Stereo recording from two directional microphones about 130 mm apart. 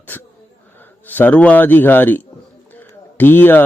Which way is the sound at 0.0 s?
15° left (ahead or behind).